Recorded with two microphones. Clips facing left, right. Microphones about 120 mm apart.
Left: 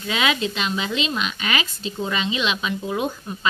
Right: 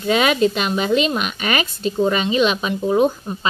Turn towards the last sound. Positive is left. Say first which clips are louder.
# right 7 dB
turn(degrees=-35)  # may be behind; listen again after turning